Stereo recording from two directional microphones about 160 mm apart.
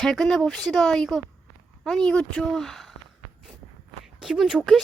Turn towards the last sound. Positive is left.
turn(degrees=-5)  # may be behind; listen again after turning